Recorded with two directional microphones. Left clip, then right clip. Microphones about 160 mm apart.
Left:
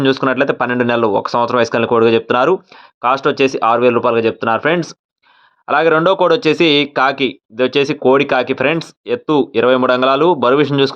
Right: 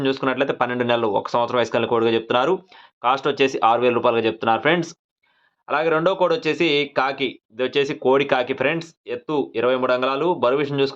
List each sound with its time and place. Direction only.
0.0 s speech: 40° left (ahead or behind)
5.6 s speech: 45° left (ahead or behind)